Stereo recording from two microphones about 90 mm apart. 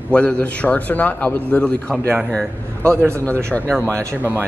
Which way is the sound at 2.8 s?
30° right (ahead or behind).